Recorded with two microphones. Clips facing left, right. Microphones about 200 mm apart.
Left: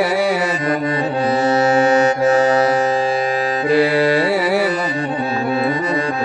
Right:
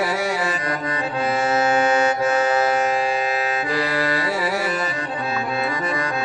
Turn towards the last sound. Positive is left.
turn(degrees=65)  # may be behind; listen again after turning